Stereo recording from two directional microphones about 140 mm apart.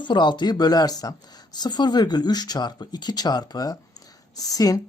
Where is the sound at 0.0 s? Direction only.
35° left (ahead or behind).